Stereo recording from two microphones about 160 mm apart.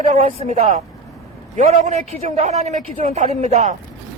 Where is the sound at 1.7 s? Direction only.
45° right (ahead or behind).